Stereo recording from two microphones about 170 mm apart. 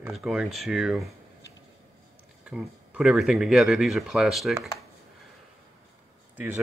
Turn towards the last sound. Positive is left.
turn(degrees=-10)  # may be behind; listen again after turning